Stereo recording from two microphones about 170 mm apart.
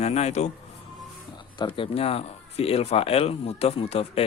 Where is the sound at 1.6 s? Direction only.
35° left (ahead or behind).